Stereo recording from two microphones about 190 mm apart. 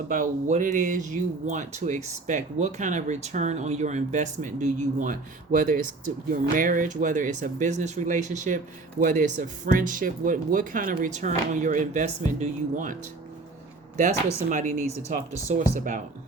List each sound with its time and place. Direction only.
0.1 s speech: 40° right (ahead or behind)
14.5 s speech: 40° right (ahead or behind)